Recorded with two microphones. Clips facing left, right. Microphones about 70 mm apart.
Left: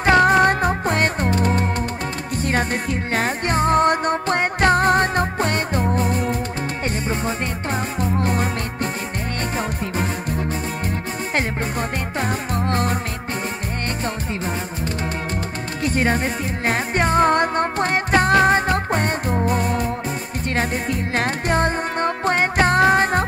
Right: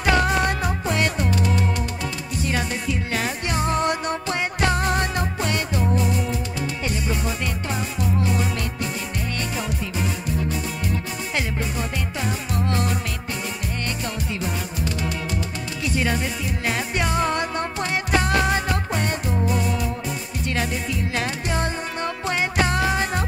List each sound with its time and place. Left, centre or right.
0.0 s music: left
9.6 s music: left
12.2 s music: left
15.8 s music: left